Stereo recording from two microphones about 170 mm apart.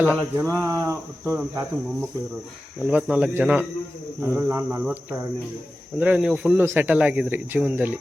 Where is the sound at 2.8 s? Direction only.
10° right (ahead or behind).